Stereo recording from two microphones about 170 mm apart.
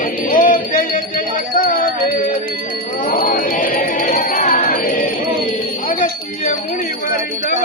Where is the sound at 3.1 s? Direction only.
55° left (ahead or behind).